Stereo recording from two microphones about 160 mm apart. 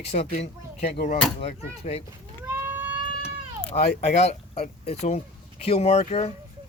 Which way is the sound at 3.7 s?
45° left (ahead or behind).